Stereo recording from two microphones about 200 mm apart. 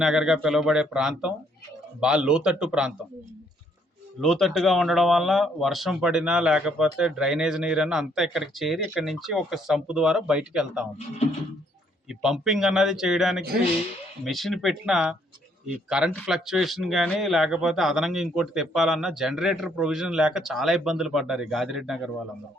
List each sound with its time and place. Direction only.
0.0 s speech: 5° right (ahead or behind)
4.2 s speech: centre (ahead or behind)
12.0 s speech: 5° right (ahead or behind)